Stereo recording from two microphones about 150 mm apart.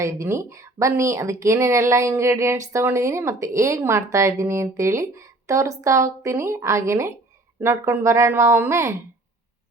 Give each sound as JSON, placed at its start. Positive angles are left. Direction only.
{"t": 0.0, "sound": "speech", "side_deg": -20}